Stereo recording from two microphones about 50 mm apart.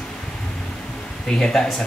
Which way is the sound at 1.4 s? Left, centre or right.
Centre.